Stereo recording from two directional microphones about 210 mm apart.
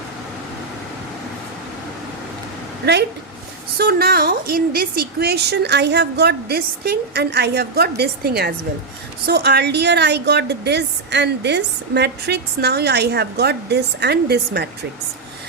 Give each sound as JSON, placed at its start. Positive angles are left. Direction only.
{"t": 3.8, "sound": "a woman's voice", "side_deg": -45}